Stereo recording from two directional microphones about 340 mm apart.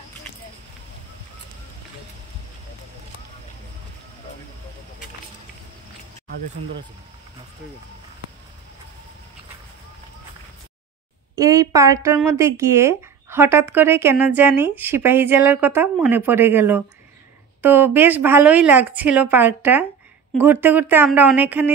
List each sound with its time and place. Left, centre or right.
11.3 s speech: centre